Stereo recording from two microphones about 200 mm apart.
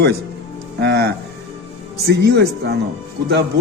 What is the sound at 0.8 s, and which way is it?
A man's voice, 55° right (ahead or behind).